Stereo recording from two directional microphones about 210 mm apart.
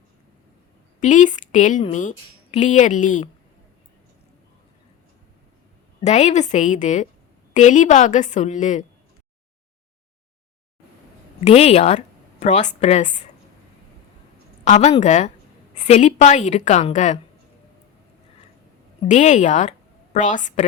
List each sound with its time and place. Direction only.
0.9 s a woman's voice: 35° left (ahead or behind)
6.0 s a woman's voice: 30° left (ahead or behind)
11.4 s a woman's voice: 30° left (ahead or behind)
14.6 s a woman's voice: 35° left (ahead or behind)
19.0 s a woman's voice: 35° left (ahead or behind)